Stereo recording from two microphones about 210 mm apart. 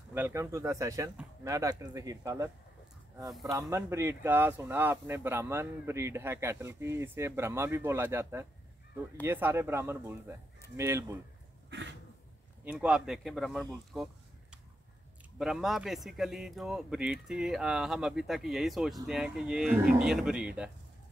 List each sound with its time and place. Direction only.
0.1 s speech: 10° right (ahead or behind)
3.7 s speech: 15° right (ahead or behind)
12.6 s speech: 5° right (ahead or behind)
15.3 s speech: centre (ahead or behind)